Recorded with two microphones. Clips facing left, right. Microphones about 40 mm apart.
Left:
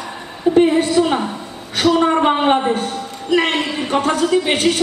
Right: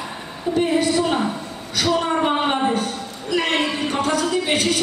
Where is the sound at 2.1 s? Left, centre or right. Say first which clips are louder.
Left 5 dB; left.